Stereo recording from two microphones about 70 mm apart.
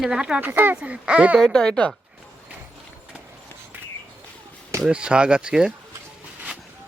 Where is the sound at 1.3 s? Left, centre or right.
Centre.